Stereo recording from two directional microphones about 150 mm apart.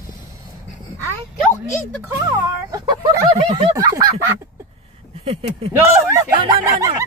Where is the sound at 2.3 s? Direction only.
20° right (ahead or behind).